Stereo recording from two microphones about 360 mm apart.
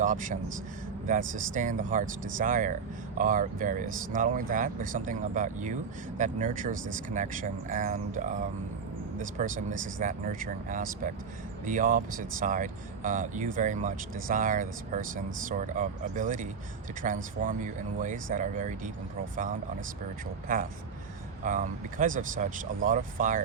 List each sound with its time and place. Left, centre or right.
0.0 s speech: right
21.4 s speech: right